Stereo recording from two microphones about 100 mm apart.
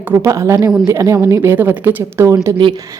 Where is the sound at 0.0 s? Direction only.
25° right (ahead or behind).